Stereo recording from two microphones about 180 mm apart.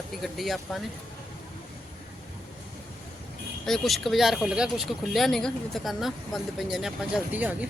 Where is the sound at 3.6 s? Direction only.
Centre (ahead or behind).